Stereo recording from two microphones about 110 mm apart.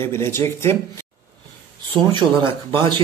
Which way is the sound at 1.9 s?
45° right (ahead or behind).